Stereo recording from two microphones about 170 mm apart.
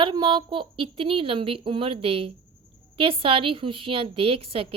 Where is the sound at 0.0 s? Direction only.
25° right (ahead or behind).